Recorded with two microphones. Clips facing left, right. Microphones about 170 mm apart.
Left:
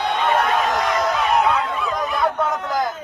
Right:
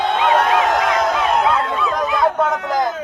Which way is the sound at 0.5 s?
80° right.